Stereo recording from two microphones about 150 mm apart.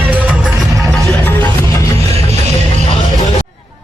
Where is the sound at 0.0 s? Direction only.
10° right (ahead or behind).